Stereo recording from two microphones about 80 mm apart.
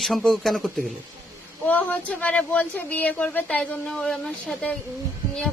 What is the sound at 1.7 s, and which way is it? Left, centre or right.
Speech, centre.